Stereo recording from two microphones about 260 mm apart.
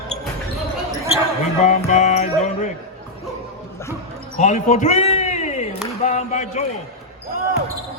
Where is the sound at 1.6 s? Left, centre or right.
Left.